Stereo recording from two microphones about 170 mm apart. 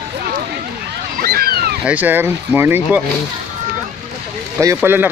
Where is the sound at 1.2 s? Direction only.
60° right (ahead or behind).